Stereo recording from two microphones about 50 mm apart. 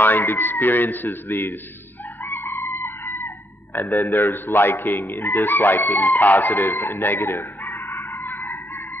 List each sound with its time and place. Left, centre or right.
0.0 s speech: left
2.2 s chicken: left
2.7 s a sound: left
3.7 s a man's voice: left
4.3 s speech: left